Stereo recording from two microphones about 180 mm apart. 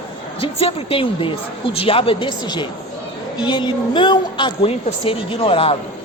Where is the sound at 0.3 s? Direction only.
30° left (ahead or behind).